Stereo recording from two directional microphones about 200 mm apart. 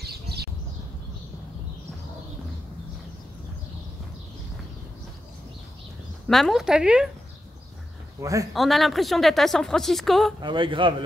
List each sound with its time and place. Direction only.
0.0 s a sound: 55° right (ahead or behind)
6.2 s a woman's voice: centre (ahead or behind)
8.2 s a man's voice: 15° right (ahead or behind)
8.5 s a woman's voice: centre (ahead or behind)
10.4 s a man's voice: 25° right (ahead or behind)